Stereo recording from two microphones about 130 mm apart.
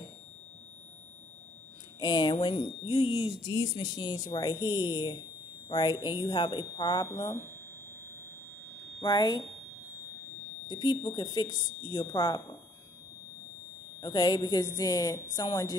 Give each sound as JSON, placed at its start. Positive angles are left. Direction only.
{"t": 2.0, "sound": "speech", "side_deg": 35}
{"t": 3.4, "sound": "a woman's voice", "side_deg": 35}
{"t": 9.0, "sound": "speech", "side_deg": 30}
{"t": 10.7, "sound": "speech", "side_deg": 35}
{"t": 14.0, "sound": "a woman's voice", "side_deg": 30}